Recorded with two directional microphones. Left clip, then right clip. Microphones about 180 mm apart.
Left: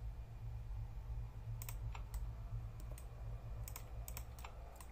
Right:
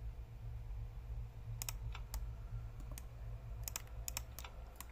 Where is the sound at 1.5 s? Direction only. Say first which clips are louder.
Right 5 dB; 75° right (ahead or behind).